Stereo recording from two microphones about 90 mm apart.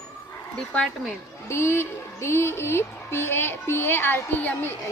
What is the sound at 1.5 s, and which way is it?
Speech, 30° left (ahead or behind).